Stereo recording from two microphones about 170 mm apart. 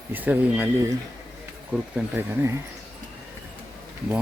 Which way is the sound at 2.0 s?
15° right (ahead or behind).